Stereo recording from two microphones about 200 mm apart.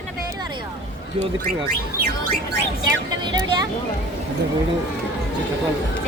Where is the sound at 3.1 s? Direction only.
20° right (ahead or behind).